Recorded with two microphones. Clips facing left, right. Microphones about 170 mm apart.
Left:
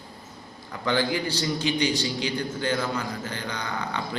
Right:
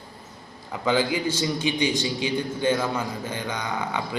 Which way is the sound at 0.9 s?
20° right (ahead or behind).